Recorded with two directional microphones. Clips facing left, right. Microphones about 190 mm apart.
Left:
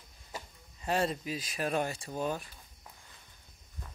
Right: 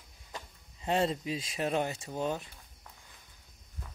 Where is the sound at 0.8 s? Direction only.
25° right (ahead or behind).